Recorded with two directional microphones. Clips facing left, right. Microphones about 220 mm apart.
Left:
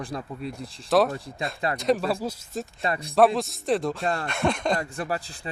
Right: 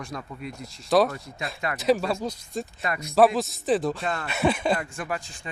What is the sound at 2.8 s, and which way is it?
Speech, 30° left (ahead or behind).